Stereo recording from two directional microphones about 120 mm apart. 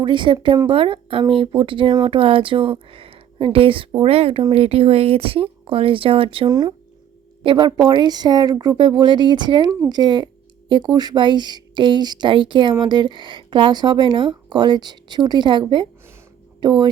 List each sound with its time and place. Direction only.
0.0 s a woman's voice: 40° right (ahead or behind)
6.5 s speech: 35° right (ahead or behind)